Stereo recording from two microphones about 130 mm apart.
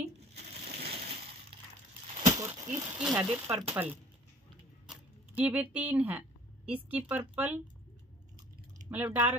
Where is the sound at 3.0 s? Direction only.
5° right (ahead or behind).